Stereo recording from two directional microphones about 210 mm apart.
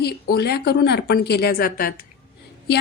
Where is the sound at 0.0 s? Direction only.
50° left (ahead or behind).